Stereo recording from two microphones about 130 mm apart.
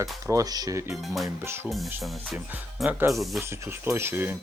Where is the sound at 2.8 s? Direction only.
20° right (ahead or behind).